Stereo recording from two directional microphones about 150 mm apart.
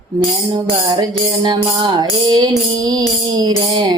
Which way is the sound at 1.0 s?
30° right (ahead or behind).